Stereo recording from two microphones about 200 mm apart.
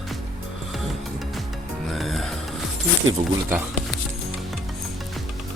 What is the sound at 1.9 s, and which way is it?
Music, centre (ahead or behind).